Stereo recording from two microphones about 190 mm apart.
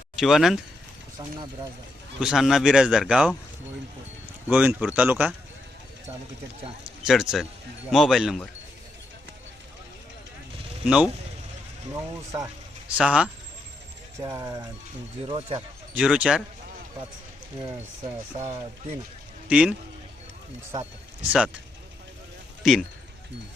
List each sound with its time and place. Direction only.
0.2 s speech: centre (ahead or behind)
2.2 s speech: centre (ahead or behind)
4.4 s speech: 5° right (ahead or behind)
7.0 s speech: centre (ahead or behind)
10.8 s speech: 5° right (ahead or behind)
11.9 s speech: 20° right (ahead or behind)
13.0 s speech: 5° right (ahead or behind)
14.2 s speech: 15° right (ahead or behind)
15.3 s speech: 30° right (ahead or behind)
16.0 s speech: 5° right (ahead or behind)
17.6 s speech: 30° right (ahead or behind)
19.5 s speech: 5° right (ahead or behind)
21.2 s speech: 5° right (ahead or behind)